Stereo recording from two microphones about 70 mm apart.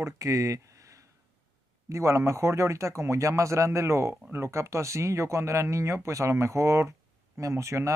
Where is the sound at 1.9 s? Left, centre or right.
Right.